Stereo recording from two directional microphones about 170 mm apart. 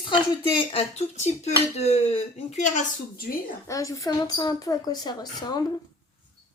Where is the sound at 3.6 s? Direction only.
20° left (ahead or behind).